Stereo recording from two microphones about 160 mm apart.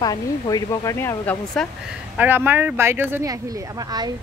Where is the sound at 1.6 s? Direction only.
Centre (ahead or behind).